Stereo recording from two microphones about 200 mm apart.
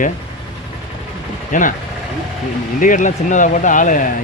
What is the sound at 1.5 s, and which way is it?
Speech, 40° left (ahead or behind).